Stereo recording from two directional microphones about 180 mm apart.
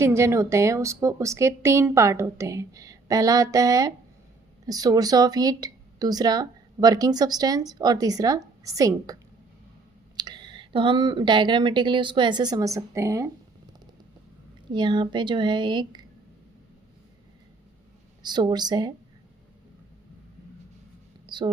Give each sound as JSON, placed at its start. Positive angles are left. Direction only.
{"t": 0.0, "sound": "a woman's voice", "side_deg": -15}
{"t": 14.7, "sound": "speech", "side_deg": -25}
{"t": 18.2, "sound": "speech", "side_deg": -25}
{"t": 21.2, "sound": "a sound", "side_deg": -25}